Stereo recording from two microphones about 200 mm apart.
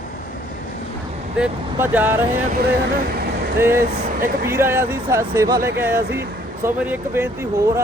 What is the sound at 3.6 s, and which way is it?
Speech, 10° right (ahead or behind).